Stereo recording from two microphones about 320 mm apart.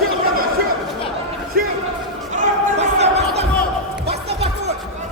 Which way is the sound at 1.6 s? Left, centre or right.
Right.